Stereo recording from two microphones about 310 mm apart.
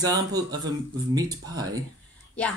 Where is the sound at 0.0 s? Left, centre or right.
Centre.